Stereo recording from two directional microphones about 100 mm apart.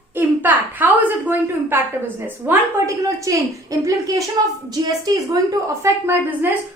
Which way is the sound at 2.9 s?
35° right (ahead or behind).